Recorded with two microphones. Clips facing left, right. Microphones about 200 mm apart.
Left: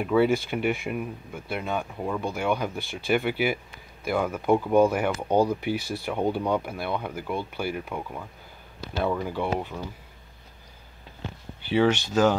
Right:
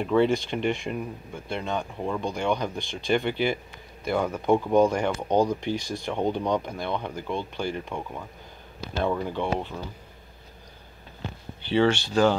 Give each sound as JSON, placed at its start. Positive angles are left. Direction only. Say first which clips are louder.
{"t": 0.0, "sound": "speech", "louder": "even", "side_deg": 5}
{"t": 11.6, "sound": "speech", "louder": "even", "side_deg": 10}